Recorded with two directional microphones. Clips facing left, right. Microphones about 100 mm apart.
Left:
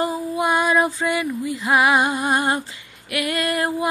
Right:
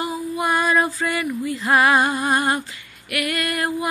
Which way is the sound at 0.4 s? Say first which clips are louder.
Left 1 dB; 20° left (ahead or behind).